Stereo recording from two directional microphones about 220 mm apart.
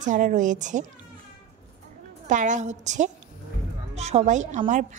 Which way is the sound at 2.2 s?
35° right (ahead or behind).